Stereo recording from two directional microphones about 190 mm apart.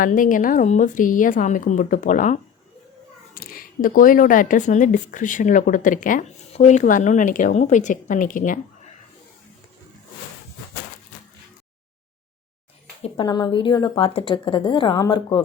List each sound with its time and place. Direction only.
0.0 s speech: 45° left (ahead or behind)
13.0 s a woman's voice: 25° left (ahead or behind)